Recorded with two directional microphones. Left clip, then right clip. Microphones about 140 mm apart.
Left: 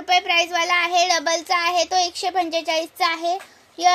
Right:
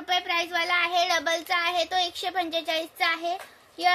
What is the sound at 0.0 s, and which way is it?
A child's voice, 20° left (ahead or behind).